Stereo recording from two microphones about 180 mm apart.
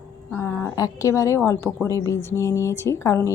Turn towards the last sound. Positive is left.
turn(degrees=15)  # may be behind; listen again after turning